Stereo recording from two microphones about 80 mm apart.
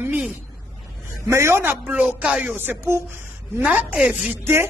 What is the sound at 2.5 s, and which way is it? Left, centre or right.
A man's voice, right.